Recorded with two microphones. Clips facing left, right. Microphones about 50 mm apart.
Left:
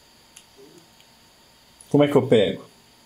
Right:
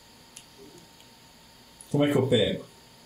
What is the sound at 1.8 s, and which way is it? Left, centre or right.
Speech, left.